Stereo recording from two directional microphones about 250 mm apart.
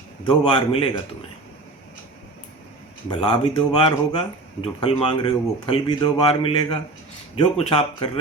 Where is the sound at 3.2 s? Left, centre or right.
Left.